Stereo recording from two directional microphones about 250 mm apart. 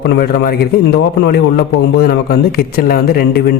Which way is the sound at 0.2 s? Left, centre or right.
Left.